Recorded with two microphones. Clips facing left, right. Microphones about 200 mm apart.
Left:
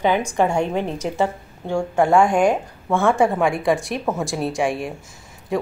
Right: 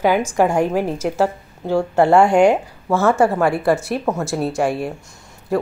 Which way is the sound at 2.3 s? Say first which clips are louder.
Right 4 dB; 65° right (ahead or behind).